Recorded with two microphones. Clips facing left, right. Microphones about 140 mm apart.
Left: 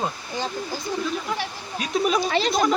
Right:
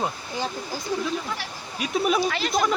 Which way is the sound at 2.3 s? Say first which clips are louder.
Left 4 dB; 25° left (ahead or behind).